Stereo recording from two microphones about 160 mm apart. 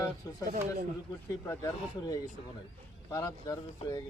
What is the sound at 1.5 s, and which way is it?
Speech, 20° left (ahead or behind).